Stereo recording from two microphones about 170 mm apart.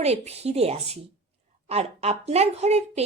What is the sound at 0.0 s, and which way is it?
A woman's voice, 40° right (ahead or behind).